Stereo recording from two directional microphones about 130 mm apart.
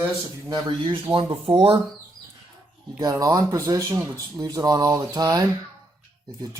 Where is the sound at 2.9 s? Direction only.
25° right (ahead or behind).